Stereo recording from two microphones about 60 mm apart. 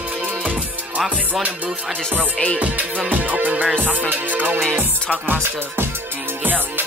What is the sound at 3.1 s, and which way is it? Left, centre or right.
Music, right.